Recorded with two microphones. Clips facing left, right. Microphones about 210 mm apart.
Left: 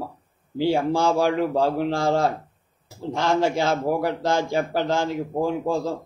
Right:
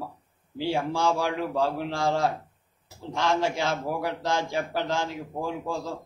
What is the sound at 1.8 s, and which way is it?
A man's voice, 60° left (ahead or behind).